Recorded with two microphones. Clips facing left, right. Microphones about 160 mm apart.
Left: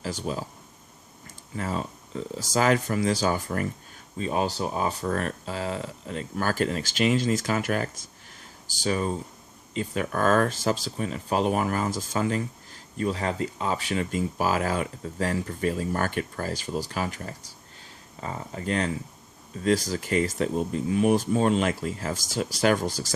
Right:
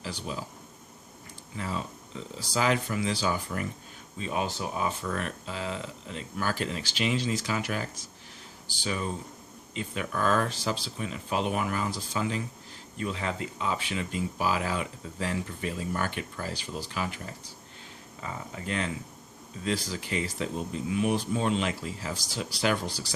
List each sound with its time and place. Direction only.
0.0 s speech: 45° left (ahead or behind)
1.5 s speech: 45° left (ahead or behind)
4.2 s speech: 35° left (ahead or behind)